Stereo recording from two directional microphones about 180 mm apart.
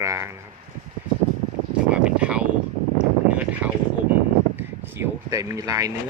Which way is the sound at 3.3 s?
10° right (ahead or behind).